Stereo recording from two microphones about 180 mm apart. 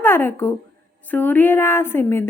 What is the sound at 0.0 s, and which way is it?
A woman's voice, 10° left (ahead or behind).